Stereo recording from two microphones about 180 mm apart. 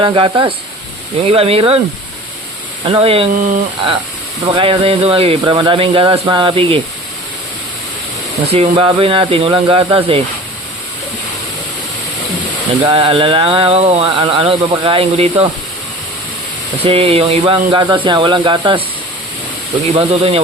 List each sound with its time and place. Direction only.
0.0 s speech: 25° right (ahead or behind)
2.8 s speech: 30° right (ahead or behind)
4.5 s speech: 30° right (ahead or behind)
8.4 s speech: 30° right (ahead or behind)
12.8 s speech: 30° right (ahead or behind)
16.8 s speech: 30° right (ahead or behind)
20.0 s speech: 30° right (ahead or behind)